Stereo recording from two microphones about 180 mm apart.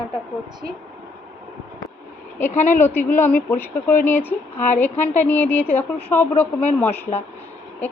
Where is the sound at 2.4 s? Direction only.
45° left (ahead or behind).